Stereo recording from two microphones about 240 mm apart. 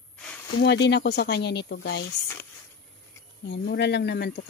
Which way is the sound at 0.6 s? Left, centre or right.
Left.